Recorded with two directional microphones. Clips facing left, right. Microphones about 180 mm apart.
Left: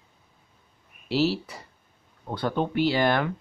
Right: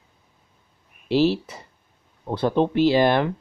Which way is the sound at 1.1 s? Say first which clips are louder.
Right 5 dB; 20° right (ahead or behind).